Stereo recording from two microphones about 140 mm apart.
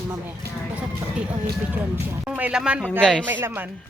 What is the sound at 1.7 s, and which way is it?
Speech, 15° right (ahead or behind).